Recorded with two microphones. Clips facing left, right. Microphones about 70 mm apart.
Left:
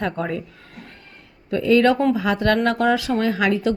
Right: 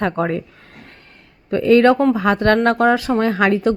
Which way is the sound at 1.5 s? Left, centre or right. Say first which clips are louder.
Right 4 dB; right.